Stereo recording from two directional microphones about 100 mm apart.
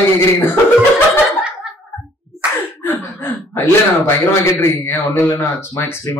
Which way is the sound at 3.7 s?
25° left (ahead or behind).